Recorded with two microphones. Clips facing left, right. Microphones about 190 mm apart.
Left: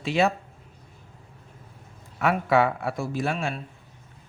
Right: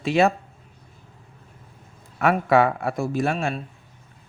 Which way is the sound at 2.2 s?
50° right (ahead or behind).